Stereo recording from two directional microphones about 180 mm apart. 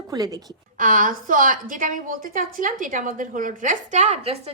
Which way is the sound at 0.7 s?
45° right (ahead or behind).